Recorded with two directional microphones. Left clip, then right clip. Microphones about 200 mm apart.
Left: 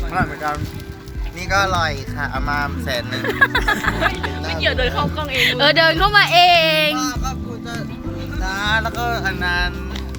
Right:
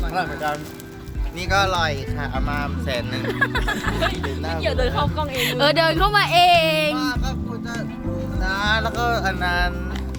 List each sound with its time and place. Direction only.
0.1 s speech: 20° right (ahead or behind)
1.5 s speech: 35° right (ahead or behind)
1.7 s speech: 15° right (ahead or behind)
2.2 s speech: 5° left (ahead or behind)
3.2 s speech: 50° left (ahead or behind)
4.6 s speech: 5° right (ahead or behind)
8.4 s music: 45° right (ahead or behind)